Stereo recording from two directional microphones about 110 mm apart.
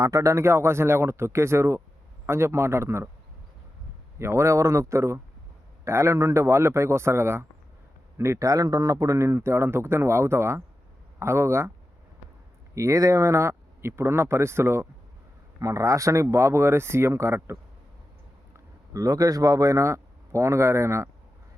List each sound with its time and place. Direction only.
0.0 s a man's voice: 30° right (ahead or behind)
4.2 s a man's voice: 25° right (ahead or behind)
12.7 s a man's voice: 30° right (ahead or behind)